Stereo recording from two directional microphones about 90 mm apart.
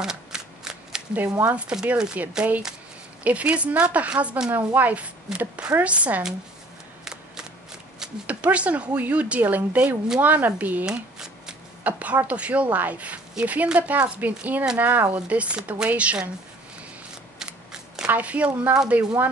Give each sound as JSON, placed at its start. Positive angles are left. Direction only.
{"t": 0.0, "sound": "shuffling cards", "side_deg": -5}
{"t": 1.4, "sound": "speech", "side_deg": -15}
{"t": 8.0, "sound": "speech", "side_deg": -15}
{"t": 10.9, "sound": "shuffling cards", "side_deg": -5}
{"t": 11.8, "sound": "speech", "side_deg": -15}
{"t": 17.4, "sound": "a sound", "side_deg": -10}